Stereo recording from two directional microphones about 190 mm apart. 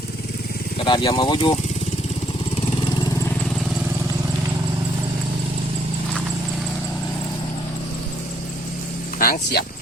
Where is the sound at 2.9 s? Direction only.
20° left (ahead or behind).